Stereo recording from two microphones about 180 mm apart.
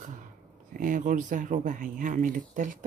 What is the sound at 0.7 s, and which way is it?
Speech, 45° right (ahead or behind).